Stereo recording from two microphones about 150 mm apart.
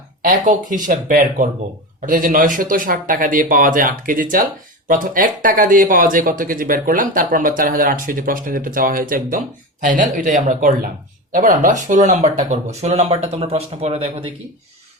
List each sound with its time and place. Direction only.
0.4 s a man's voice: 60° right (ahead or behind); by 14.3 s 40° right (ahead or behind)